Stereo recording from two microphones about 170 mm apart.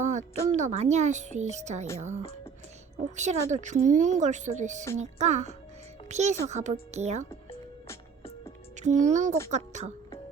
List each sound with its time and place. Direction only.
0.0 s a sound: 45° right (ahead or behind)
0.5 s a woman's voice: 40° right (ahead or behind)
3.2 s a woman's voice: 45° right (ahead or behind)
8.8 s a woman's voice: 45° right (ahead or behind)